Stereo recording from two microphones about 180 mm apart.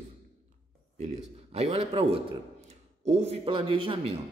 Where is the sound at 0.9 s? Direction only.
35° right (ahead or behind).